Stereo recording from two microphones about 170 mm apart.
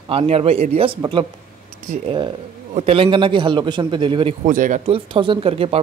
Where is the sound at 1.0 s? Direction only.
30° right (ahead or behind).